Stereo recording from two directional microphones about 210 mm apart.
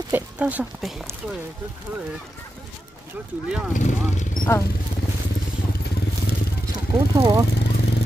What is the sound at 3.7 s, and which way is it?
Speech, 35° left (ahead or behind).